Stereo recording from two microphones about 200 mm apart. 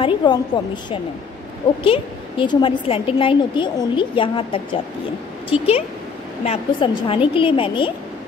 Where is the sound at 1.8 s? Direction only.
25° left (ahead or behind).